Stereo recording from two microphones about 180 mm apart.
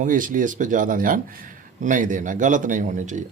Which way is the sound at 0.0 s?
50° right (ahead or behind).